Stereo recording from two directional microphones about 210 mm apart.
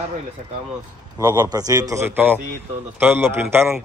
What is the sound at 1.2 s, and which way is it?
A man's voice, 20° right (ahead or behind).